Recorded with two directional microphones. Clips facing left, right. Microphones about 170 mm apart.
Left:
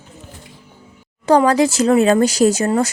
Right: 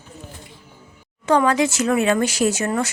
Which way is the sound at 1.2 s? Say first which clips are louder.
Left 4 dB; 35° left (ahead or behind).